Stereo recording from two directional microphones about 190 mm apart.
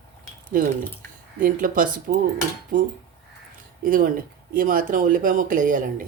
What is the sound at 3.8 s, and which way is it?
Speech, 45° right (ahead or behind).